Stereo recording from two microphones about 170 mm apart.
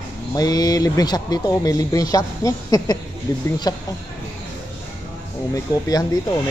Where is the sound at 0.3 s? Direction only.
20° left (ahead or behind).